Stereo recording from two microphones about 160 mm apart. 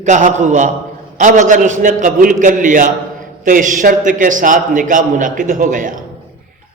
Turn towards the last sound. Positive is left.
turn(degrees=-55)  # may be behind; listen again after turning